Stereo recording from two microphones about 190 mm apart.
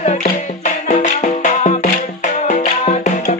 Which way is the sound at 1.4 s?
35° left (ahead or behind).